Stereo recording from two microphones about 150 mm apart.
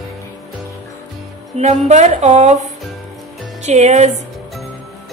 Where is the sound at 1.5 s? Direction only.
45° right (ahead or behind).